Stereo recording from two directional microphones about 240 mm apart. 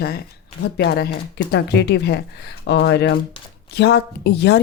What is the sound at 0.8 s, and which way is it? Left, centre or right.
A woman's voice, left.